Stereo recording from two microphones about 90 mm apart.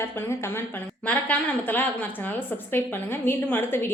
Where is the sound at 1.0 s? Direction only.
15° left (ahead or behind).